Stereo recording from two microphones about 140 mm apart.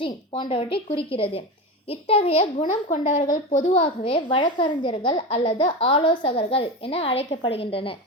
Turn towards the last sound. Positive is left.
turn(degrees=40)  # may be behind; listen again after turning